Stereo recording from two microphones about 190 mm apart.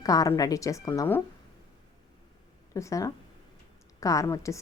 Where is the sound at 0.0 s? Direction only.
20° left (ahead or behind).